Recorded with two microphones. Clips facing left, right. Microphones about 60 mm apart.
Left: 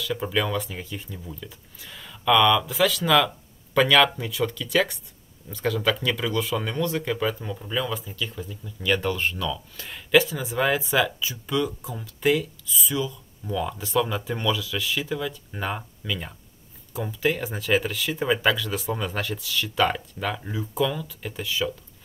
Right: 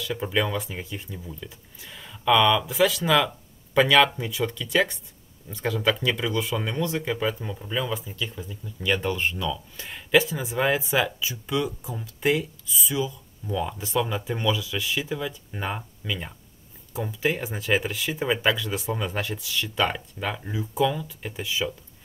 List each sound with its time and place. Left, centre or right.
0.3 s speech: centre